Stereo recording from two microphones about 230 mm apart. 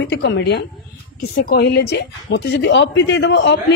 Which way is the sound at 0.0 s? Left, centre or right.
Left.